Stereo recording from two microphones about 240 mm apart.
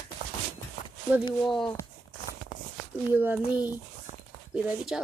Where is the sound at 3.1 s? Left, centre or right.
Centre.